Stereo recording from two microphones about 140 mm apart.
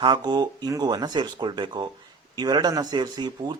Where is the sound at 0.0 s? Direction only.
35° right (ahead or behind).